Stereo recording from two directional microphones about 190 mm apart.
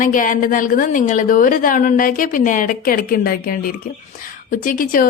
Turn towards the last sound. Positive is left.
turn(degrees=45)  # may be behind; listen again after turning